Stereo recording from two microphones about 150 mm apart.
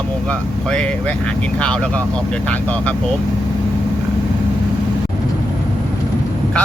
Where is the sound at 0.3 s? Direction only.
5° left (ahead or behind).